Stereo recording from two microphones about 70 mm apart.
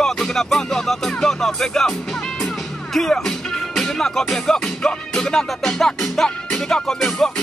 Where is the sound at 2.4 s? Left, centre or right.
Centre.